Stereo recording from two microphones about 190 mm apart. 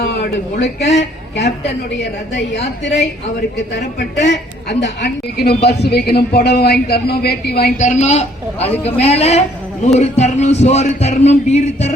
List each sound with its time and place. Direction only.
0.6 s a woman's voice: 65° left (ahead or behind)
3.8 s a woman's voice: 70° left (ahead or behind)
7.8 s a sound: 40° left (ahead or behind)